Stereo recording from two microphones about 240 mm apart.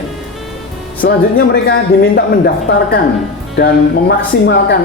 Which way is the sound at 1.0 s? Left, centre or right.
Left.